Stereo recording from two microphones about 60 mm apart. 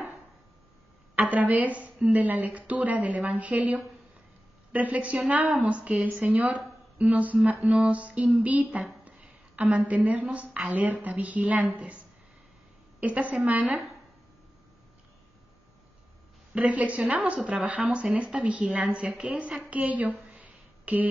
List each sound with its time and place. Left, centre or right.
1.3 s speech: right
9.0 s a sound: right
10.2 s speech: right
13.0 s speech: right
16.5 s speech: right
18.7 s a woman's voice: centre
19.6 s a sound: right